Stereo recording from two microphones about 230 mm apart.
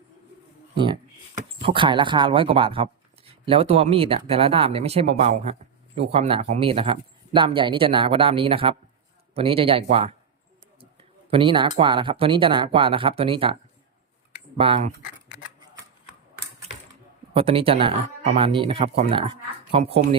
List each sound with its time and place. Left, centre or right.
1.6 s speech: right
11.3 s speech: right
14.6 s speech: right
17.3 s speech: right